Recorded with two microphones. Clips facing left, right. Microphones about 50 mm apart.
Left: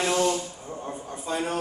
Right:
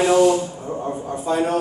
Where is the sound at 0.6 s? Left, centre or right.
Right.